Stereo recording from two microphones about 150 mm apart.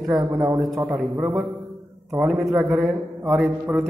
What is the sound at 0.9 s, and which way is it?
A man's voice, 5° right (ahead or behind).